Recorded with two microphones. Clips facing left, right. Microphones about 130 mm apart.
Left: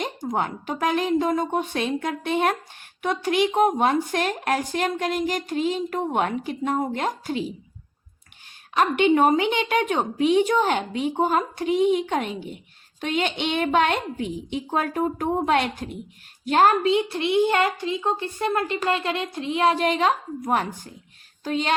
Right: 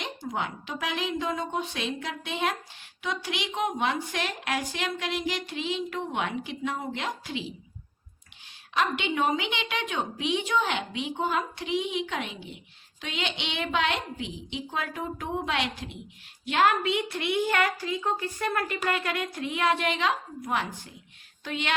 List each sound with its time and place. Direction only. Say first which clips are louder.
0.0 s a woman's voice: left 6 dB; 45° left (ahead or behind)
8.7 s a woman's voice: left 9 dB; 45° left (ahead or behind)